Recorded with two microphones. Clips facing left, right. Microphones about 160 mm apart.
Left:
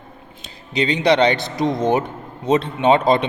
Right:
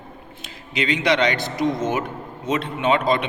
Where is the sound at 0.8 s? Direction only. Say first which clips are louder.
Left 4 dB; 30° left (ahead or behind).